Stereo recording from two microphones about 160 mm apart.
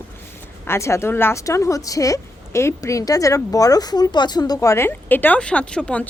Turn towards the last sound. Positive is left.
turn(degrees=10)  # may be behind; listen again after turning